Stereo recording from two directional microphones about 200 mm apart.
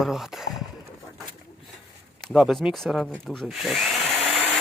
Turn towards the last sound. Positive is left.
turn(degrees=5)  # may be behind; listen again after turning